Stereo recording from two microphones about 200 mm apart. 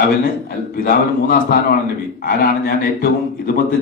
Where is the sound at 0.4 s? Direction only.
50° left (ahead or behind).